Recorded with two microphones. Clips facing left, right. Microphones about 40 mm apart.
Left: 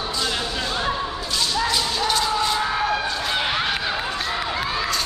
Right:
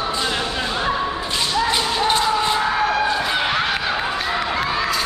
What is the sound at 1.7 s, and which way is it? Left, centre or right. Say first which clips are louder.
Music: right 3 dB; right.